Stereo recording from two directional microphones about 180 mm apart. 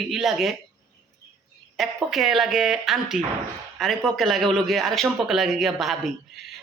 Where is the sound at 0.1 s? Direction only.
Centre (ahead or behind).